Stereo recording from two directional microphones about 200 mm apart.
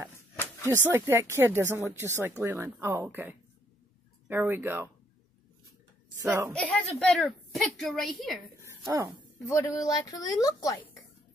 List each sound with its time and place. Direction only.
0.7 s speech: 15° right (ahead or behind)
6.2 s speech: 10° right (ahead or behind)
6.5 s a woman's voice: 5° left (ahead or behind)
8.5 s a sound: 15° right (ahead or behind)
9.5 s speech: 15° left (ahead or behind)